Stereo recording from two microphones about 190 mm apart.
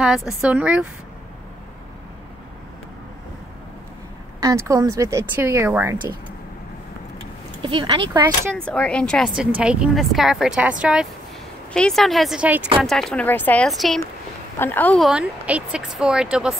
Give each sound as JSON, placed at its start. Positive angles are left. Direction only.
{"t": 0.0, "sound": "speech", "side_deg": -5}
{"t": 4.4, "sound": "speech", "side_deg": -15}
{"t": 7.6, "sound": "speech", "side_deg": -25}
{"t": 8.5, "sound": "speech", "side_deg": 5}